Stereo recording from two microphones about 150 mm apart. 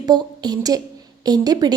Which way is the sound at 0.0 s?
25° right (ahead or behind).